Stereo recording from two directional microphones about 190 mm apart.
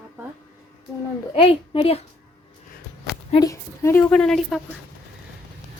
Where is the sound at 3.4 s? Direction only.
15° left (ahead or behind).